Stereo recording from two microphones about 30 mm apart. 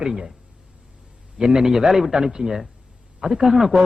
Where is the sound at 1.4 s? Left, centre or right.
Right.